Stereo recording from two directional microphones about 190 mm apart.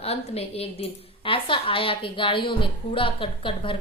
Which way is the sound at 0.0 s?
30° left (ahead or behind).